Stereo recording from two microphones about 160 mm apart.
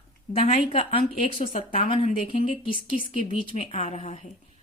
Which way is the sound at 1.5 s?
50° left (ahead or behind).